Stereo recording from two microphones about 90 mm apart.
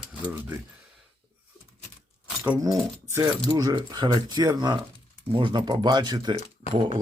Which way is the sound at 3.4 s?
50° right (ahead or behind).